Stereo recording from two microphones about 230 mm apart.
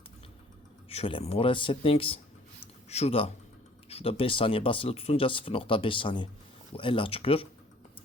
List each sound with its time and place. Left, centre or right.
0.9 s speech: left